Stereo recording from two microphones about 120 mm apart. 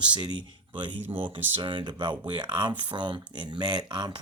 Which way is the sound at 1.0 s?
15° right (ahead or behind).